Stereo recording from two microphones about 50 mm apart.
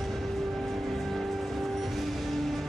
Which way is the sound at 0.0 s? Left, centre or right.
Centre.